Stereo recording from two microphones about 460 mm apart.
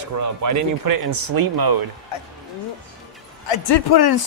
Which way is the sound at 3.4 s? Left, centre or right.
Left.